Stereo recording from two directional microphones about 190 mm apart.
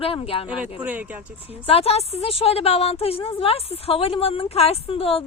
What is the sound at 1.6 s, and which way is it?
A woman's voice, 30° left (ahead or behind).